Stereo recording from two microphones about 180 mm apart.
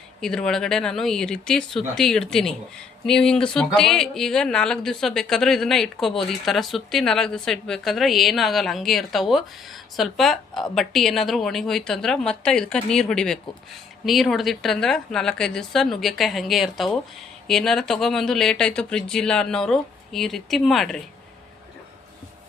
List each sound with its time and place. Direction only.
0.2 s speech: 5° left (ahead or behind)